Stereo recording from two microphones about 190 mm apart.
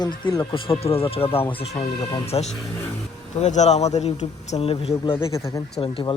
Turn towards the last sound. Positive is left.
turn(degrees=30)  # may be behind; listen again after turning